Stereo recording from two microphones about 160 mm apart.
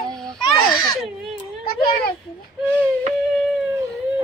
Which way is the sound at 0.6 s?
25° left (ahead or behind).